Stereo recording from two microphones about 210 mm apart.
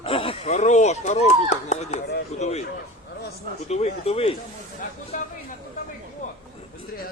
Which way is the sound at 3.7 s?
30° left (ahead or behind).